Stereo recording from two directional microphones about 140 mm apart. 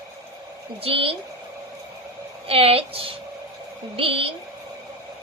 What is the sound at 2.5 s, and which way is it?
A woman's voice, 45° right (ahead or behind).